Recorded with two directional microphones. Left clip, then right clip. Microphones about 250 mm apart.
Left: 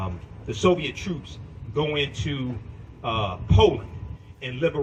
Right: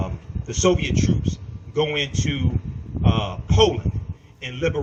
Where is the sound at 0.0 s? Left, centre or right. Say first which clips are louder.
Right 2 dB; right.